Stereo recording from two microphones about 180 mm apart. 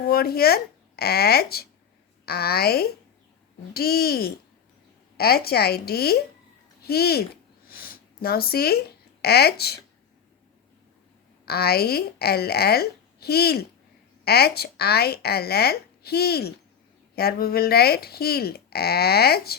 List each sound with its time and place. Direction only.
0.0 s speech: 60° left (ahead or behind)
7.7 s a sound: 55° left (ahead or behind)
9.2 s speech: 65° left (ahead or behind)
11.4 s speech: 60° left (ahead or behind)